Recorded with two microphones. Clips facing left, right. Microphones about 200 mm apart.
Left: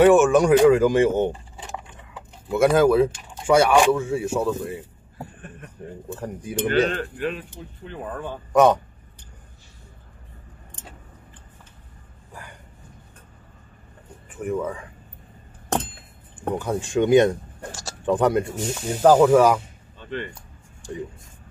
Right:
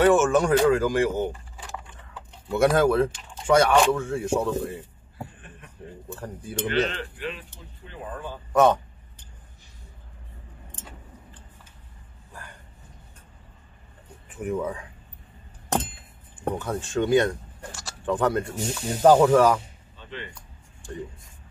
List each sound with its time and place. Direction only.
0.0 s a sound: 15° left (ahead or behind)
2.4 s speech: centre (ahead or behind)
6.1 s speech: 20° left (ahead or behind)
6.7 s speech: 40° left (ahead or behind)
14.3 s speech: centre (ahead or behind)
16.5 s speech: 10° left (ahead or behind)
18.5 s speech: centre (ahead or behind)
20.0 s music: 55° left (ahead or behind)